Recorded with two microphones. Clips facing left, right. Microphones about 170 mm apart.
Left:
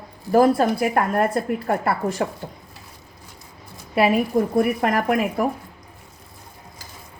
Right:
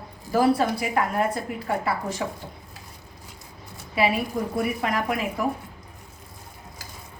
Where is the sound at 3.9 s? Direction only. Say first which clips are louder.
Left 6 dB; 50° left (ahead or behind).